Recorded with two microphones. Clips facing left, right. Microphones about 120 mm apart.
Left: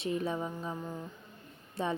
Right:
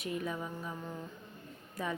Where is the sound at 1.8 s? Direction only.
25° left (ahead or behind).